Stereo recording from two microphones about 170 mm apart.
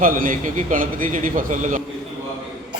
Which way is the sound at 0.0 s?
55° right (ahead or behind).